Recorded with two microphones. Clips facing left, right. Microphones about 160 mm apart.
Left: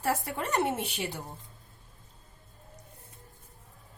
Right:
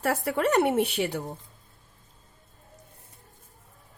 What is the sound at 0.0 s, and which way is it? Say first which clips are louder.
Speech: right 6 dB; 65° right (ahead or behind).